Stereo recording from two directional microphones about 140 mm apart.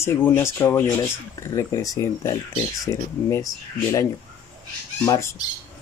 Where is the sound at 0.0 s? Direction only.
15° left (ahead or behind).